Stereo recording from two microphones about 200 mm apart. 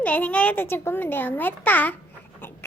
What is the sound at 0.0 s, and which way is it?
A child's voice, 10° left (ahead or behind).